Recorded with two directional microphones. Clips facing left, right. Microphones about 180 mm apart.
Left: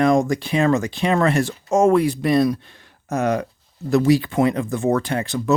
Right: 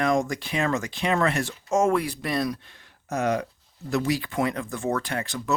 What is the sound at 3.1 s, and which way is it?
Speech, 50° left (ahead or behind).